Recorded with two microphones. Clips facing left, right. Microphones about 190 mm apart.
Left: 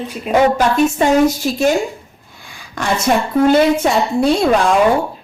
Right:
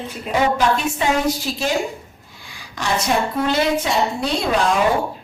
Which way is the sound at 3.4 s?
50° left (ahead or behind).